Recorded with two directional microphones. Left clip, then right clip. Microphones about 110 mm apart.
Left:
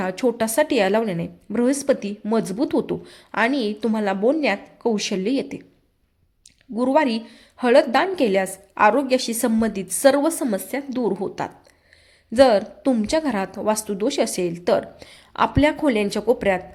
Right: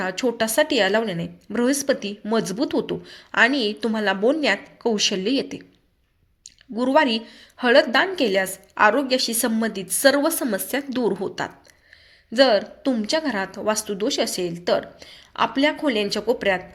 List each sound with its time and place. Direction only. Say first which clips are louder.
0.0 s a woman's voice: left 1 dB; 30° left (ahead or behind)
6.7 s a woman's voice: even; 25° left (ahead or behind)